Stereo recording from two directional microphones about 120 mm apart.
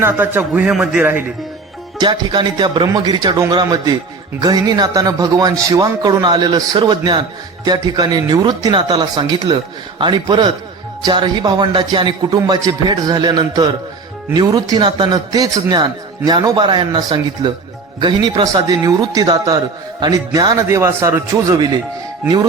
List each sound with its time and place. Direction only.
0.0 s speech: 15° right (ahead or behind)
0.7 s a man's voice: 5° right (ahead or behind)
2.0 s a man's voice: 40° right (ahead or behind)